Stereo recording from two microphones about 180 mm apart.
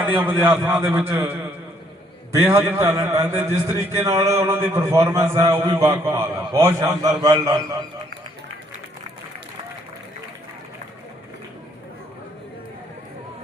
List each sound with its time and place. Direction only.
0.0 s a man's voice: 10° right (ahead or behind)
2.4 s a man's voice: 15° right (ahead or behind)